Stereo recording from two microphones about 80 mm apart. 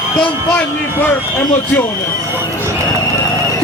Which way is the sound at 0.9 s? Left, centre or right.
Left.